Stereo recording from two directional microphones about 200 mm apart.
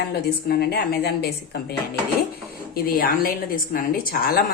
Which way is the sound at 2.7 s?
45° left (ahead or behind).